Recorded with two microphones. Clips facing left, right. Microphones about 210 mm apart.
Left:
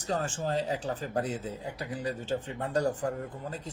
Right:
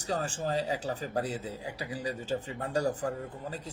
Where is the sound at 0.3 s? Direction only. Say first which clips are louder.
Left 1 dB; 10° right (ahead or behind).